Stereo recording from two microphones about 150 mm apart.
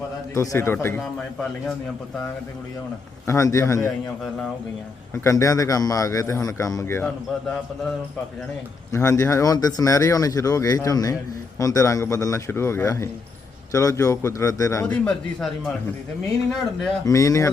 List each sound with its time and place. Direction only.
0.3 s a man's voice: 15° left (ahead or behind)
3.2 s a man's voice: 20° left (ahead or behind)
5.1 s a man's voice: 20° left (ahead or behind)
8.9 s a man's voice: 20° left (ahead or behind)
14.8 s a man's voice: 5° left (ahead or behind)
17.1 s a man's voice: 20° left (ahead or behind)